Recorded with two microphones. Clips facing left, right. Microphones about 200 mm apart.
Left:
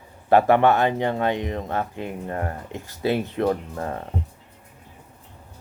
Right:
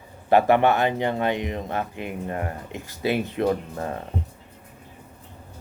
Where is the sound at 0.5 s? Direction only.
15° right (ahead or behind).